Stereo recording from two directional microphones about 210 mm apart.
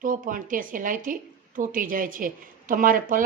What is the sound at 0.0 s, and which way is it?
A woman's voice, 40° right (ahead or behind).